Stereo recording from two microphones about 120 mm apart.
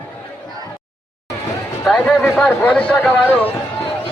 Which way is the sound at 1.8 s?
5° left (ahead or behind).